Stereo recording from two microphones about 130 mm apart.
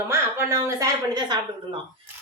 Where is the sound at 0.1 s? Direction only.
20° right (ahead or behind).